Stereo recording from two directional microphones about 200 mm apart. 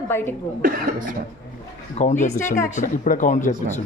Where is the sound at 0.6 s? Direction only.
45° right (ahead or behind).